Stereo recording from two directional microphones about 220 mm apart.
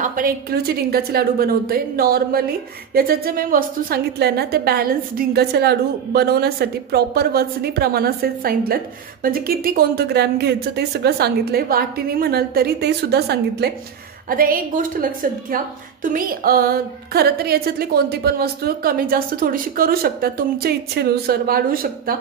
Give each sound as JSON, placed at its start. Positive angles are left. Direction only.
{"t": 0.0, "sound": "a woman's voice", "side_deg": -40}